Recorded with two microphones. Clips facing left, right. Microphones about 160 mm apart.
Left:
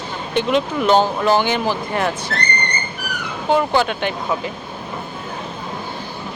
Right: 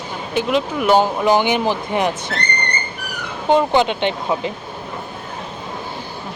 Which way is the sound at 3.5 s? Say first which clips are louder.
Right 2 dB; 20° right (ahead or behind).